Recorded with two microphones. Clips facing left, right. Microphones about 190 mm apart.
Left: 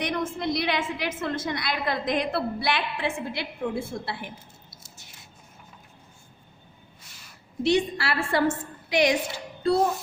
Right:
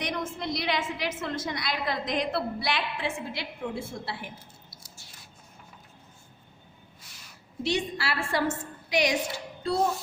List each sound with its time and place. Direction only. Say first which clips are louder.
0.0 s a woman's voice: left 4 dB; 55° left (ahead or behind)
4.7 s a sound: left 1 dB; 25° left (ahead or behind)
7.6 s a woman's voice: left 6 dB; 60° left (ahead or behind)